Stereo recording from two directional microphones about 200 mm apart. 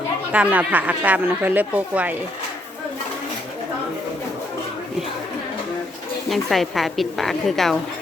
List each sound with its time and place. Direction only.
0.3 s speech: 10° right (ahead or behind)
6.3 s a woman's voice: centre (ahead or behind)